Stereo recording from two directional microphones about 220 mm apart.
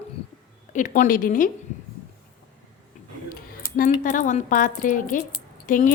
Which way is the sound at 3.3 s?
40° left (ahead or behind).